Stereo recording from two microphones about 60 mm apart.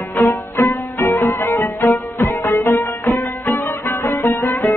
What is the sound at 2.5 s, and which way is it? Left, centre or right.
Music, left.